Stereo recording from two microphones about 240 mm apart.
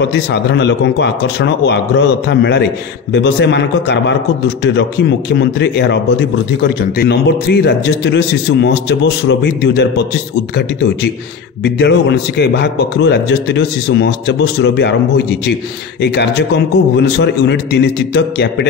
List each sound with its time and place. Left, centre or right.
0.0 s a man's voice: left